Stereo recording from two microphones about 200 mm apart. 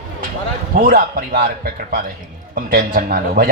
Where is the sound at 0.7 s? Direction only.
45° right (ahead or behind).